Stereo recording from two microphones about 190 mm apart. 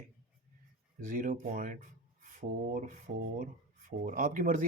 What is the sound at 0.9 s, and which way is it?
Speech, 45° right (ahead or behind).